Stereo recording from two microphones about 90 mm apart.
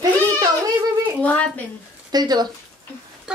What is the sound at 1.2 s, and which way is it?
Speech, 15° left (ahead or behind).